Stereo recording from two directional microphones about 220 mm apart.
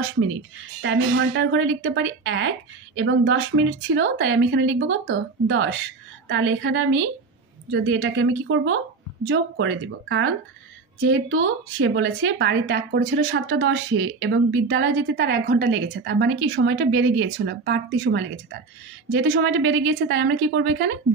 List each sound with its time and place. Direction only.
0.8 s speech: 55° right (ahead or behind)